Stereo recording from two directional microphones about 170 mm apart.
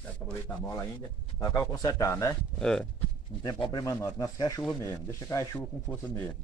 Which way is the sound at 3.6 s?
25° left (ahead or behind).